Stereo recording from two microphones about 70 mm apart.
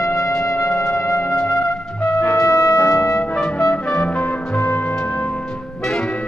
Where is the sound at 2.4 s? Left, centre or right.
Left.